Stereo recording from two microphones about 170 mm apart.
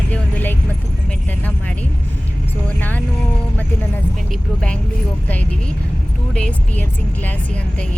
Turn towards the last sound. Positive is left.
turn(degrees=10)  # may be behind; listen again after turning